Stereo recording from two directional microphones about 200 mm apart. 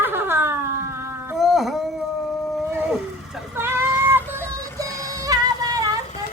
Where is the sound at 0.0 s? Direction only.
10° right (ahead or behind).